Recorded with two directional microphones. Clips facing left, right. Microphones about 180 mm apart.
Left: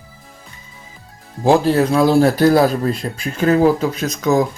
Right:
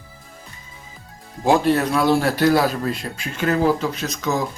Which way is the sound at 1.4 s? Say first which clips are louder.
Left 4 dB; 35° left (ahead or behind).